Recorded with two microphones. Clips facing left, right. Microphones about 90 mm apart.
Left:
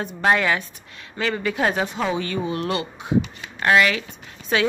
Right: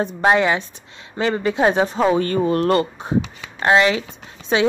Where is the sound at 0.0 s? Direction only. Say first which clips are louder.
Right 4 dB; 25° right (ahead or behind).